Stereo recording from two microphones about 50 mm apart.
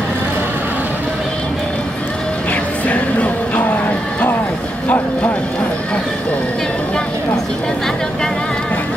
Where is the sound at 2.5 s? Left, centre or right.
Left.